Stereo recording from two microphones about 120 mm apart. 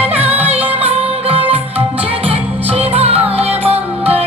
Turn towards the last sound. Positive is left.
turn(degrees=-55)  # may be behind; listen again after turning